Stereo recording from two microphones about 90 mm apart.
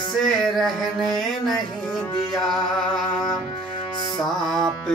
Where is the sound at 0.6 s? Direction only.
Centre (ahead or behind).